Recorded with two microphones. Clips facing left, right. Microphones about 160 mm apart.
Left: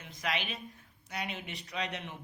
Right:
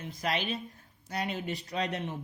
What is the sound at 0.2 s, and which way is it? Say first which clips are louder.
Speech: right 4 dB; 35° right (ahead or behind).